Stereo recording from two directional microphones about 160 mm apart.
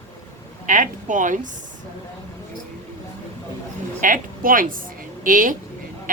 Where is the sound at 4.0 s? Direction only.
60° right (ahead or behind).